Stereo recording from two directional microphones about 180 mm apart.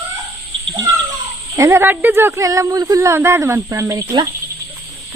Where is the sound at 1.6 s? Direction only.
15° right (ahead or behind).